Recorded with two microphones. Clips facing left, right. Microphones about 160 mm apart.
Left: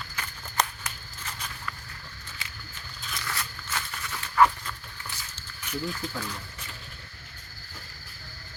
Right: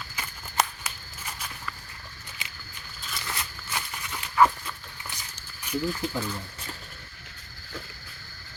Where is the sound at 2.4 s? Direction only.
20° right (ahead or behind).